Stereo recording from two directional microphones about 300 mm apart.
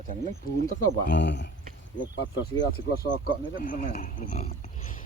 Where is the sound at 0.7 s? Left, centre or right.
Left.